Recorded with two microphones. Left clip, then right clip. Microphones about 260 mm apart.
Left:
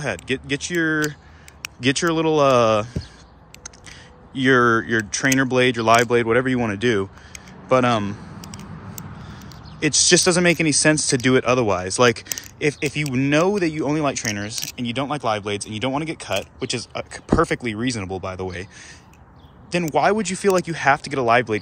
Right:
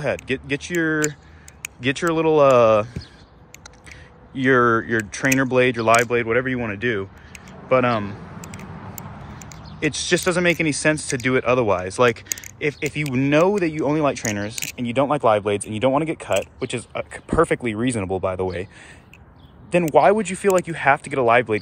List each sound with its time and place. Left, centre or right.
0.0 s speech: centre
4.3 s speech: centre
8.4 s a sound: centre
9.8 s speech: centre
19.7 s speech: centre